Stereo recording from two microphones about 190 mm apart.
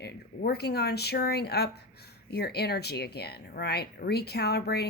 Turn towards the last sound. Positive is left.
turn(degrees=60)  # may be behind; listen again after turning